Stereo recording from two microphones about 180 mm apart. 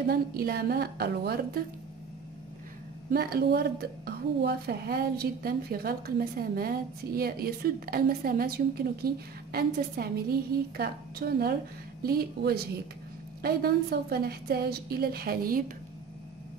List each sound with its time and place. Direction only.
0.1 s a woman's voice: 55° right (ahead or behind)
3.1 s a woman's voice: 55° right (ahead or behind)